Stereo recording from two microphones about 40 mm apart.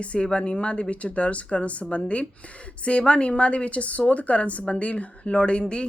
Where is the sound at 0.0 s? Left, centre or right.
Left.